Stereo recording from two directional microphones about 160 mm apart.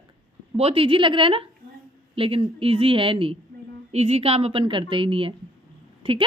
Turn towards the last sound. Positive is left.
turn(degrees=-35)  # may be behind; listen again after turning